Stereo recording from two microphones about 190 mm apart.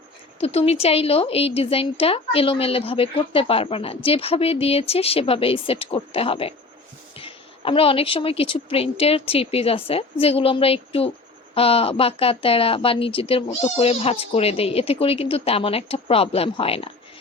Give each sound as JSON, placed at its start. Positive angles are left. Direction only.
{"t": 0.3, "sound": "a woman's voice", "side_deg": 30}